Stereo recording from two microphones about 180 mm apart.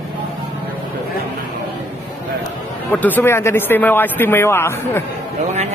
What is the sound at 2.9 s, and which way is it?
Speech, 10° left (ahead or behind).